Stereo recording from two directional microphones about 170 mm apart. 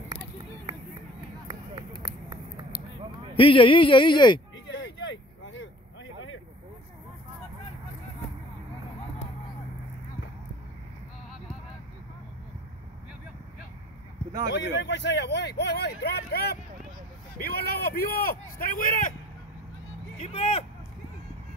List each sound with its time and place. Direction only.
3.3 s speech: 30° left (ahead or behind)
4.7 s vehicle: 90° left
14.5 s speech: 90° left; by 19.1 s 50° left (ahead or behind)
20.2 s speech: 35° left (ahead or behind)